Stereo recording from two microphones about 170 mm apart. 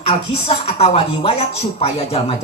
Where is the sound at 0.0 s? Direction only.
35° left (ahead or behind).